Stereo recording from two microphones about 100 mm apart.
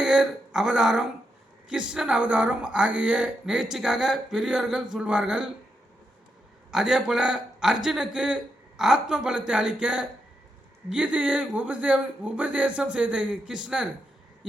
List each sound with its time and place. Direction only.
0.0 s speech: 5° right (ahead or behind)
6.7 s speech: 5° right (ahead or behind)